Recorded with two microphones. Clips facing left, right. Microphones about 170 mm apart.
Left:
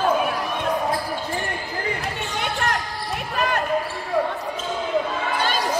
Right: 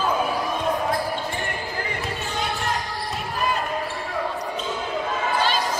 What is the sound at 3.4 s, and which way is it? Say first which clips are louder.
Basketball bounce: left 2 dB; 65° left (ahead or behind).